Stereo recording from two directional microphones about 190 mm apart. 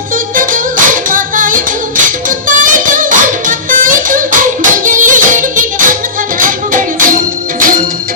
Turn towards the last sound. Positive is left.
turn(degrees=-45)  # may be behind; listen again after turning